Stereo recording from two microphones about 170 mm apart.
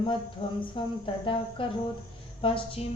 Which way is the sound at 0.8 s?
30° left (ahead or behind).